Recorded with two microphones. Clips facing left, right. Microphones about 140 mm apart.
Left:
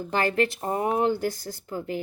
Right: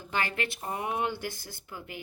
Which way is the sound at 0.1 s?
40° left (ahead or behind).